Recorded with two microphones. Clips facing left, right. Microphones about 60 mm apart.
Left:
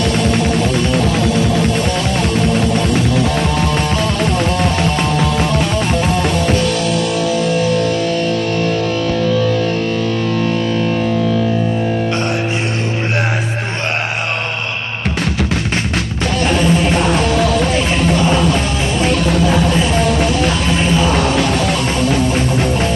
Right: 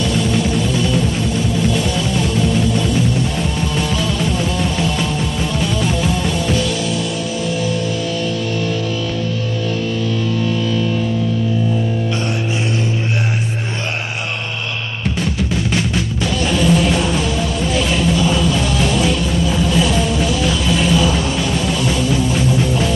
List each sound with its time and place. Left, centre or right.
0.1 s music: left
2.1 s music: left
16.4 s music: left
17.0 s music: left
18.0 s music: left
19.3 s music: left
21.1 s music: left